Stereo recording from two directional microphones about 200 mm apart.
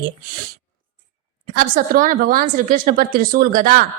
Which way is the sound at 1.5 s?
45° right (ahead or behind).